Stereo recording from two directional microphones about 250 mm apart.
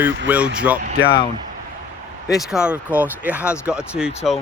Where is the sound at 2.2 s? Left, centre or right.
Centre.